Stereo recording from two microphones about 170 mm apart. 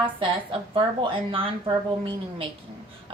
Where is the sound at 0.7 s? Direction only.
30° right (ahead or behind).